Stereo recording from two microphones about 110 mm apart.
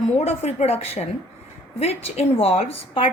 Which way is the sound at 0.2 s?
80° left.